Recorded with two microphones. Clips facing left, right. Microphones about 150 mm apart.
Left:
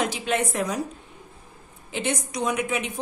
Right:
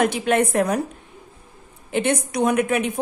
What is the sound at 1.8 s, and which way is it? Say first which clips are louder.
A woman's voice: right 7 dB; 60° right (ahead or behind).